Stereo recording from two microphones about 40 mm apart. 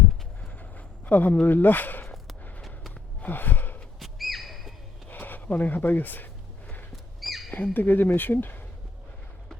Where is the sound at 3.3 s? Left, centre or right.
Left.